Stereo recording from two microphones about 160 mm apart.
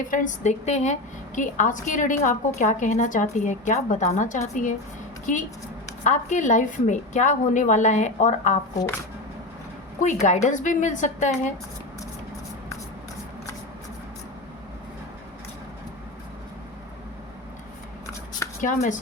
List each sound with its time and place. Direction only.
0.0 s a woman's voice: 55° left (ahead or behind)
10.0 s a woman's voice: 50° left (ahead or behind)
18.6 s a woman's voice: 50° left (ahead or behind)